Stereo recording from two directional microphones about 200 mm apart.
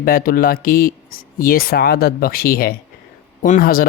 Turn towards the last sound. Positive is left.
turn(degrees=45)  # may be behind; listen again after turning